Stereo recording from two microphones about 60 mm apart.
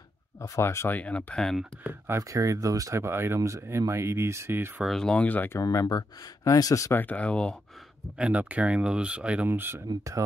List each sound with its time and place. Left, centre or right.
0.4 s speech: left
0.8 s speech: left
1.9 s speech: right
2.2 s speech: right
3.0 s speech: right
3.3 s speech: right
3.8 s speech: right
5.0 s speech: left
5.6 s speech: left
6.9 s speech: left
8.2 s speech: right
9.5 s speech: right